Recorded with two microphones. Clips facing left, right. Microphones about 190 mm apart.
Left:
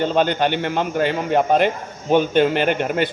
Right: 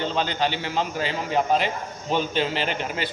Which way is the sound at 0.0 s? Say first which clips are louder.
Left 7 dB; 50° left (ahead or behind).